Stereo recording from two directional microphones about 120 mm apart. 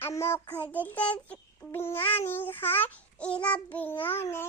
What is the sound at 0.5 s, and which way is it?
A child's voice, 15° left (ahead or behind).